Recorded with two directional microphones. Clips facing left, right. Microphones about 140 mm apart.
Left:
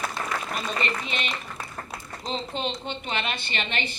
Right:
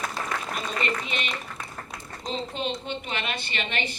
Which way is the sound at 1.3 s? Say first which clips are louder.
Even; 30° left (ahead or behind).